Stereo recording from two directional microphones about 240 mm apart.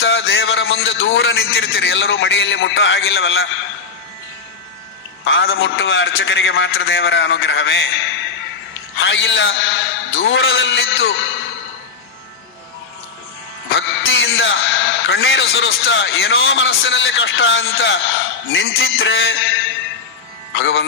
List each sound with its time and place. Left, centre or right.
0.0 s a man's voice: left
5.2 s a man's voice: left
13.7 s a man's voice: left